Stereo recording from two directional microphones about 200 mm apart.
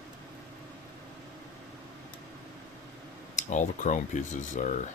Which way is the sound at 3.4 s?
40° left (ahead or behind).